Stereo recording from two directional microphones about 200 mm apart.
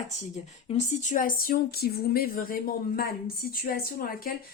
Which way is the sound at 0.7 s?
35° left (ahead or behind).